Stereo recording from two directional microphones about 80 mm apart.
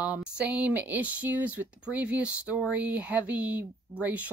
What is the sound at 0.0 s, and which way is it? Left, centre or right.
Speech, centre.